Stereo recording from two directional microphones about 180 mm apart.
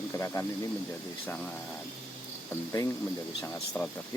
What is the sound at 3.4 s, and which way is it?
Speech, 10° left (ahead or behind).